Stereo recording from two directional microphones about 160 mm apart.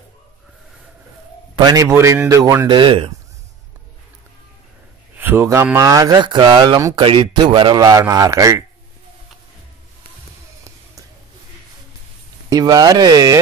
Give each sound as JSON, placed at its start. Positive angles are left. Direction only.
{"t": 1.6, "sound": "speech", "side_deg": -25}
{"t": 2.8, "sound": "speech", "side_deg": -35}
{"t": 5.1, "sound": "speech", "side_deg": -10}
{"t": 12.4, "sound": "speech", "side_deg": -20}